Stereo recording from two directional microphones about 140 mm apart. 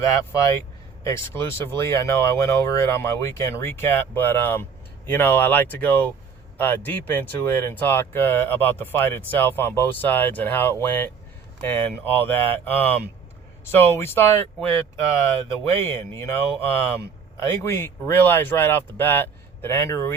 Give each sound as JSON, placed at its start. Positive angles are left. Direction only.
{"t": 1.0, "sound": "speech", "side_deg": 20}
{"t": 15.7, "sound": "speech", "side_deg": 20}